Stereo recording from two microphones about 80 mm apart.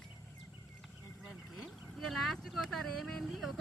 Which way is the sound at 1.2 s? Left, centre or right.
Centre.